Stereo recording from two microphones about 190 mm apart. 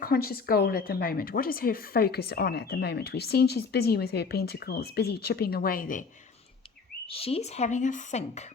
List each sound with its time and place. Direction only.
0.0 s speech: 50° left (ahead or behind)
7.1 s a woman's voice: 30° left (ahead or behind)